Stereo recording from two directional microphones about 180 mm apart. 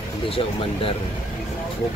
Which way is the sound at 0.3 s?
30° left (ahead or behind).